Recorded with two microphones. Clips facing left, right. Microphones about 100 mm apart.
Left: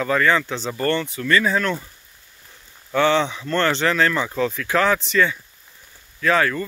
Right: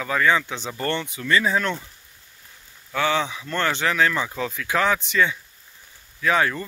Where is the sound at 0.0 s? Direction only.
10° right (ahead or behind).